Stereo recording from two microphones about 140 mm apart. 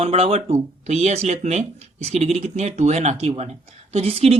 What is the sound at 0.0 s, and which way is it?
Speech, 45° right (ahead or behind).